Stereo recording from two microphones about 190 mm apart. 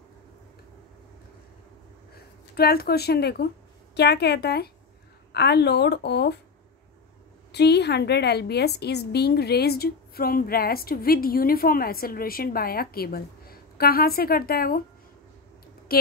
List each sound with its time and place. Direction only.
2.1 s a woman's voice: 55° left (ahead or behind)
7.5 s a woman's voice: 60° left (ahead or behind)
15.9 s a woman's voice: 50° left (ahead or behind)